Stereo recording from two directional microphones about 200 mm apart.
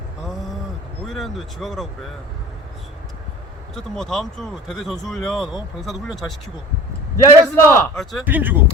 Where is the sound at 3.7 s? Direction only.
Centre (ahead or behind).